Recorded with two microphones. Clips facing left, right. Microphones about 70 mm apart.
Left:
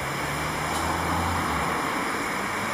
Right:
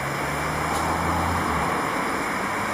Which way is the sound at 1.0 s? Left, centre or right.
Centre.